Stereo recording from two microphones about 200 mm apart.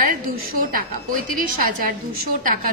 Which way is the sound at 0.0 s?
45° right (ahead or behind).